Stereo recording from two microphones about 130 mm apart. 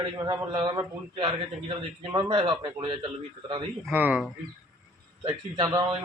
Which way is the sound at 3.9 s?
10° right (ahead or behind).